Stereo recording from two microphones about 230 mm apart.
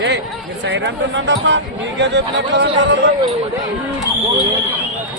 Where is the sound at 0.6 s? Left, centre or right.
Right.